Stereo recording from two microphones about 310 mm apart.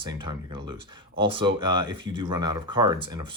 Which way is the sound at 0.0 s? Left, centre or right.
Centre.